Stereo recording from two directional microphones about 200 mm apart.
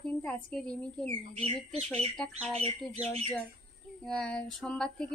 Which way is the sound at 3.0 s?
30° right (ahead or behind).